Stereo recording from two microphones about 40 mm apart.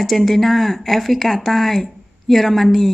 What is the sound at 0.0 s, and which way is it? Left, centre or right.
Speech, centre.